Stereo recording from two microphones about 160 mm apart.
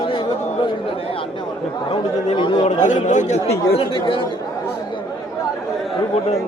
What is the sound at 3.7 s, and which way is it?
Speech, 35° left (ahead or behind).